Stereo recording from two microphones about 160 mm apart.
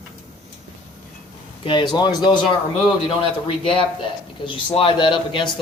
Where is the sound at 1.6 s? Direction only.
30° left (ahead or behind).